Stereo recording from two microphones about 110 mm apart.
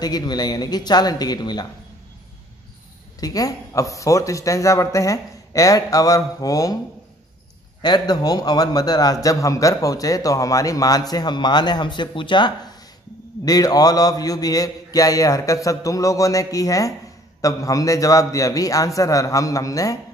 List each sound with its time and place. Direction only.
0.0 s a man's voice: 40° left (ahead or behind)
3.2 s a man's voice: 35° left (ahead or behind)
7.8 s a man's voice: 40° left (ahead or behind)